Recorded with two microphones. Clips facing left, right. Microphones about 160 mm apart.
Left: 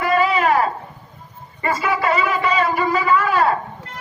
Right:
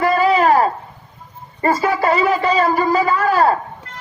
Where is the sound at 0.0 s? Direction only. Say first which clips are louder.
Right 3 dB; 40° right (ahead or behind).